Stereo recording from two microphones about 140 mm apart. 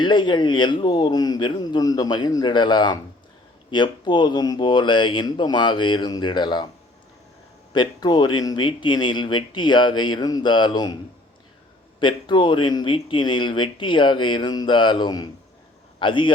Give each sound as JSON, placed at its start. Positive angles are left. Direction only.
{"t": 0.0, "sound": "speech", "side_deg": 35}
{"t": 7.7, "sound": "speech", "side_deg": 30}
{"t": 11.9, "sound": "a man's voice", "side_deg": 35}